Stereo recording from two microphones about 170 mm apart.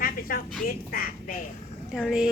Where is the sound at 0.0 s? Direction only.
60° left (ahead or behind).